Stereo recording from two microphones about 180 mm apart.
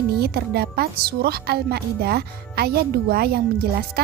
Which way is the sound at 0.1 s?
60° right (ahead or behind).